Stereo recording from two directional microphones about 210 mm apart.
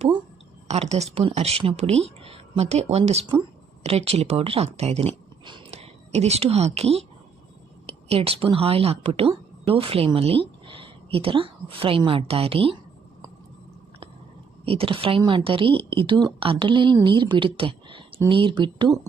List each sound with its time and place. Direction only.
0.7 s a woman's voice: 30° right (ahead or behind)
14.6 s a woman's voice: 25° right (ahead or behind)